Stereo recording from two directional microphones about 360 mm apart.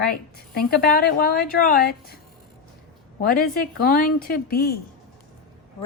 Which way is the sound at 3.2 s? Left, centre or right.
Left.